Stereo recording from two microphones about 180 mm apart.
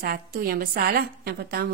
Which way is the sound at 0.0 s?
55° right (ahead or behind).